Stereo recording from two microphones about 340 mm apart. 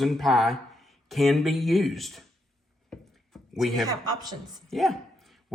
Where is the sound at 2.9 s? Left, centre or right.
Centre.